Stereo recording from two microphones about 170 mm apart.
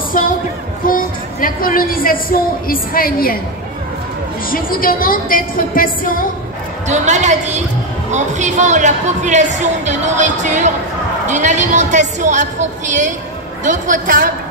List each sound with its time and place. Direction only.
0.1 s a woman's voice: 55° left (ahead or behind)
4.5 s a woman's voice: 55° left (ahead or behind)
6.9 s a woman's voice: 45° right (ahead or behind)